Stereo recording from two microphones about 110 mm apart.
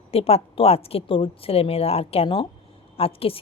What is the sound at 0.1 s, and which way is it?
Speech, 65° left (ahead or behind).